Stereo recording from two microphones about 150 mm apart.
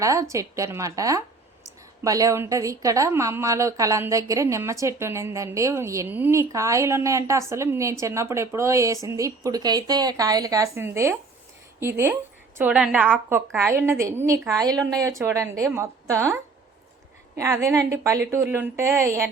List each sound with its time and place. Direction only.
0.0 s a woman's voice: 20° right (ahead or behind)